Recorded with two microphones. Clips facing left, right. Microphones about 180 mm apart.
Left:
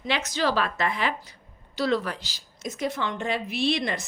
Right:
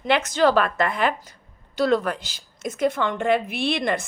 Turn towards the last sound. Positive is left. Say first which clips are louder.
# right 2 dB
turn(degrees=-55)  # may be behind; listen again after turning